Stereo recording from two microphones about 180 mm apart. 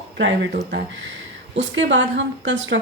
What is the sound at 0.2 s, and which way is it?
A woman's voice, 75° right (ahead or behind).